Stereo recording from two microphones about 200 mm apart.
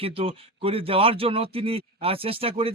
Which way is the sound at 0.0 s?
30° right (ahead or behind).